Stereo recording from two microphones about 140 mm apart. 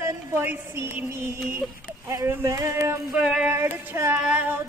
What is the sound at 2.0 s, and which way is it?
Speech, 20° right (ahead or behind).